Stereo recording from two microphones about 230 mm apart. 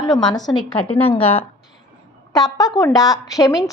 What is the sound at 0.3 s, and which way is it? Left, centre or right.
Speech, centre.